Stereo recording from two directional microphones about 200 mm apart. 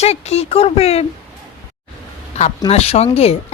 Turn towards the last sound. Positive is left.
turn(degrees=30)  # may be behind; listen again after turning